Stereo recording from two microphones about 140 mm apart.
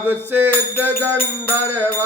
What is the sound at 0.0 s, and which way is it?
Music, 15° right (ahead or behind).